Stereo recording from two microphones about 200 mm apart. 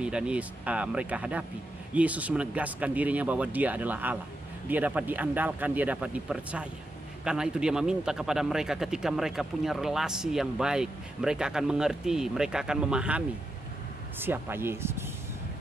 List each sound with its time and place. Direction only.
0.0 s a man's voice: 5° right (ahead or behind)
14.2 s speech: 10° right (ahead or behind)